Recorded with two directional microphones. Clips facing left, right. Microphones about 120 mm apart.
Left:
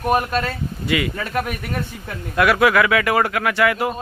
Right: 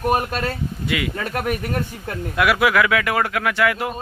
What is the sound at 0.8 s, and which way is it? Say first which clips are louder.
Speech: left 3 dB; centre (ahead or behind).